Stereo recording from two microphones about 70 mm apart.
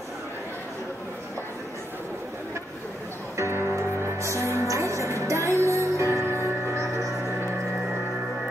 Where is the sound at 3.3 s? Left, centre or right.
Right.